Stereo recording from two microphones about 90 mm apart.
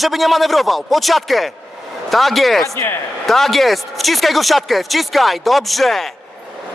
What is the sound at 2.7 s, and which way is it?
Speech, 25° left (ahead or behind).